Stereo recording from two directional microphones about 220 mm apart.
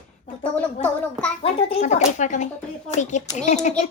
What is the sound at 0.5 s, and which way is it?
Speech, 5° left (ahead or behind).